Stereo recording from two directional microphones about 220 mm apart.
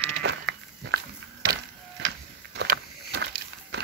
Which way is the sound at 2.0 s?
50° right (ahead or behind).